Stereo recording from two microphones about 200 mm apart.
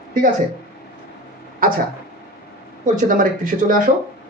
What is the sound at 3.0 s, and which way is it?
Speech, 40° right (ahead or behind).